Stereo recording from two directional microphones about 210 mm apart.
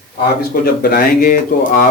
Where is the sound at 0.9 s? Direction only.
40° left (ahead or behind).